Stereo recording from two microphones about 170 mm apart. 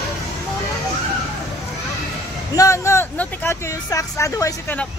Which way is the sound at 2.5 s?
20° left (ahead or behind).